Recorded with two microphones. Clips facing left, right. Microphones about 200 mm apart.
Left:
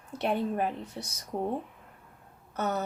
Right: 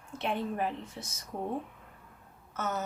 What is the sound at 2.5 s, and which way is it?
Speech, 35° left (ahead or behind).